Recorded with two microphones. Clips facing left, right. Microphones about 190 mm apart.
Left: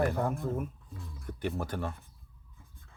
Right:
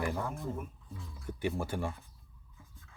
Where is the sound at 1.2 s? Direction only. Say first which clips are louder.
Even; 10° right (ahead or behind).